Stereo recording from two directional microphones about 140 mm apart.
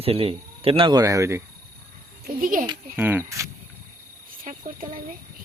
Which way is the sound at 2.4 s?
80° right.